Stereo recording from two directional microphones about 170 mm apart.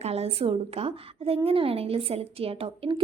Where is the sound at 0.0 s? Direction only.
35° right (ahead or behind).